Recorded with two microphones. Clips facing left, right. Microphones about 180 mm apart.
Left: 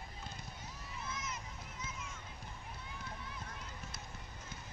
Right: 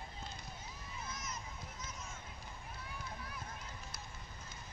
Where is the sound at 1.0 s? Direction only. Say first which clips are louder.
Left 2 dB; 40° right (ahead or behind).